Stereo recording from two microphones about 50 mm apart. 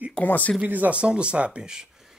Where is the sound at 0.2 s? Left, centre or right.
Left.